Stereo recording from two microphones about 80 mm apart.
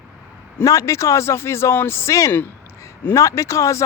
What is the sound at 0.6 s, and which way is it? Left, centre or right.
Speech, left.